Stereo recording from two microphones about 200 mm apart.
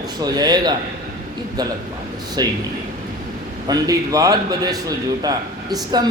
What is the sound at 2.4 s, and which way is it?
Speech, 20° right (ahead or behind).